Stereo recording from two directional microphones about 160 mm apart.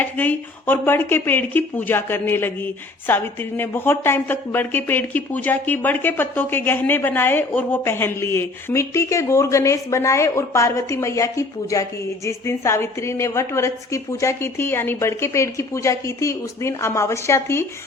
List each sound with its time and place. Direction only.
0.0 s speech: 10° left (ahead or behind)